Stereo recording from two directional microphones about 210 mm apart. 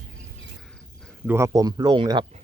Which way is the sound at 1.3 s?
15° right (ahead or behind).